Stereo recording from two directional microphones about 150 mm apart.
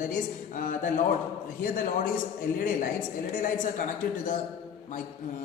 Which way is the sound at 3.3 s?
60° left (ahead or behind).